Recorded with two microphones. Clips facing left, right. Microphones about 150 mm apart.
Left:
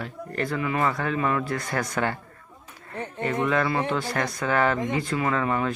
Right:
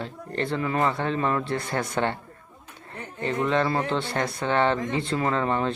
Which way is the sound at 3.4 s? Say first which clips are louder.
Right 1 dB; 30° right (ahead or behind).